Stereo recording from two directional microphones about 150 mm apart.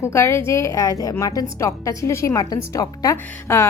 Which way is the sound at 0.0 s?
20° left (ahead or behind).